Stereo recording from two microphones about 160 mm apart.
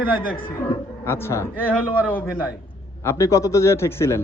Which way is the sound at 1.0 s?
15° left (ahead or behind).